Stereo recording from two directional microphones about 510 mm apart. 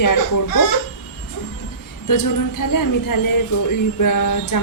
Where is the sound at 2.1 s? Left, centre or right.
Left.